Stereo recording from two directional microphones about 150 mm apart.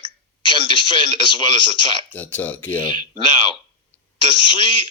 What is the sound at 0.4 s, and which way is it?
A man's voice, 35° left (ahead or behind).